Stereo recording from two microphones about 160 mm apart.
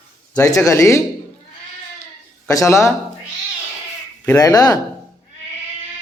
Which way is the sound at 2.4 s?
20° left (ahead or behind).